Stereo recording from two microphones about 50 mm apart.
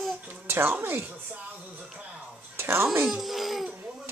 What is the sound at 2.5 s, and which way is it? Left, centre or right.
Speech, right.